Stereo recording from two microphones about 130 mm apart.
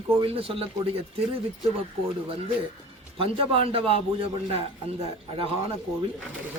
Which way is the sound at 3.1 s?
45° right (ahead or behind).